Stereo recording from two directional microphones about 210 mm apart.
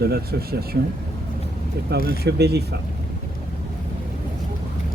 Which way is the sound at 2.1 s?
50° right (ahead or behind).